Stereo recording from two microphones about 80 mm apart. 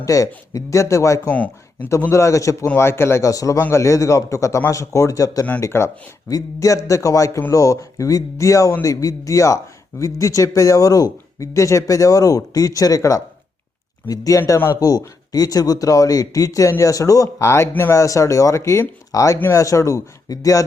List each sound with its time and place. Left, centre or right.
0.0 s speech: left
1.3 s speech: centre
2.0 s speech: left
2.7 s speech: left
5.5 s speech: left
18.0 s speech: left